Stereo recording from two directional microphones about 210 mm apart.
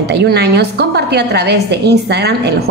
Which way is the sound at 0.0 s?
50° right (ahead or behind).